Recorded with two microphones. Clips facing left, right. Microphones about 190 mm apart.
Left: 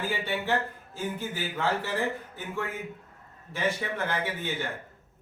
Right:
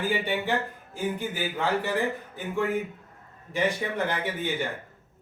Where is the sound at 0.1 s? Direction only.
15° right (ahead or behind).